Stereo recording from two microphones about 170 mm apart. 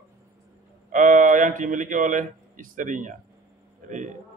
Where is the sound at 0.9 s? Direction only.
50° right (ahead or behind).